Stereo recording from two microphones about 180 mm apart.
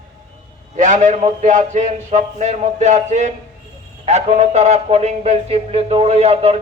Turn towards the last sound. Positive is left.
turn(degrees=-35)  # may be behind; listen again after turning